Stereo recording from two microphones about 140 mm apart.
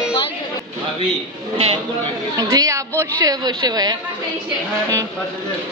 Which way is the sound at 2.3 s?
25° right (ahead or behind).